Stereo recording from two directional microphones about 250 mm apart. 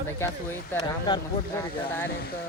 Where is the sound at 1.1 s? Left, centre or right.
Centre.